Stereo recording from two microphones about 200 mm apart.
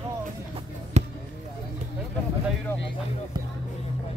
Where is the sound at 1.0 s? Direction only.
35° right (ahead or behind).